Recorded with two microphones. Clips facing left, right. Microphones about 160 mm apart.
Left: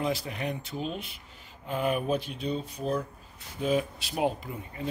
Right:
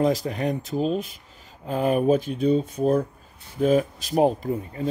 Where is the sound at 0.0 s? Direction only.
40° right (ahead or behind).